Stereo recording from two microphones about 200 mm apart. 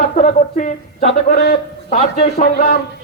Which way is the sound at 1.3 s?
50° left (ahead or behind).